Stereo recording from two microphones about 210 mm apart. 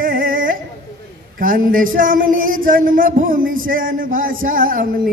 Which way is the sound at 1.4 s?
40° right (ahead or behind).